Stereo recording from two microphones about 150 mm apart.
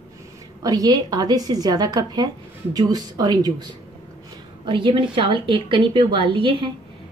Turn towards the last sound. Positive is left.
turn(degrees=-35)  # may be behind; listen again after turning